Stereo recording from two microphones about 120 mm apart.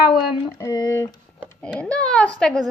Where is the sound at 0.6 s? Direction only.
30° left (ahead or behind).